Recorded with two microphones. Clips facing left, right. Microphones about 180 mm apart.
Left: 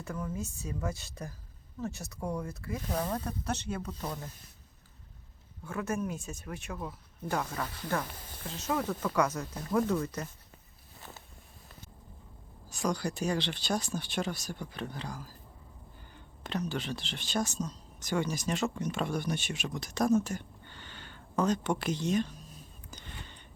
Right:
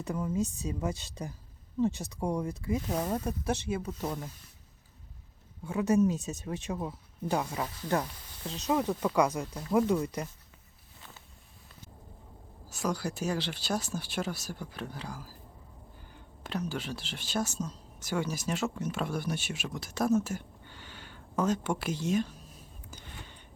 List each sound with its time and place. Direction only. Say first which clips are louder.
0.0 s speech: right 6 dB; 20° right (ahead or behind)
5.6 s speech: right 8 dB; 15° right (ahead or behind)
12.6 s speech: even; 5° right (ahead or behind)
22.9 s a sound: even; 10° right (ahead or behind)